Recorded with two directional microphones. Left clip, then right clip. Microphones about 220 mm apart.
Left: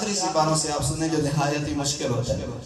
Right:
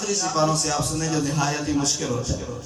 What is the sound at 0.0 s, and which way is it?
A man's voice, 20° left (ahead or behind).